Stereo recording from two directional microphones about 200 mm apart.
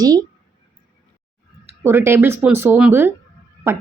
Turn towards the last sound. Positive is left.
turn(degrees=-10)  # may be behind; listen again after turning